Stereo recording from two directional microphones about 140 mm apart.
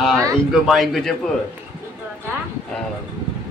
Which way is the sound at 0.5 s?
Centre (ahead or behind).